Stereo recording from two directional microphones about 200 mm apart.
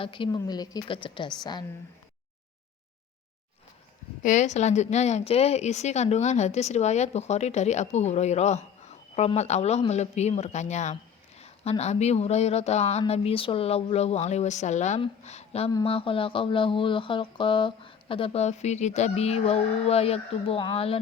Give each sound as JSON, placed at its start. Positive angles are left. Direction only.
{"t": 0.0, "sound": "speech", "side_deg": 25}
{"t": 4.2, "sound": "speech", "side_deg": 35}